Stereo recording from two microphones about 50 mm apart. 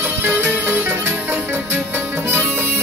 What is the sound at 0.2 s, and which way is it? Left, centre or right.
Music, right.